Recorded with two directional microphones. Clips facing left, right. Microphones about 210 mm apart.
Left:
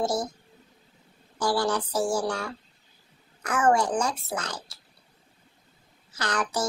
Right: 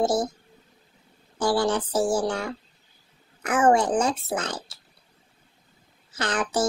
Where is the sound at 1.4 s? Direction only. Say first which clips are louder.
Right 3 dB; 25° right (ahead or behind).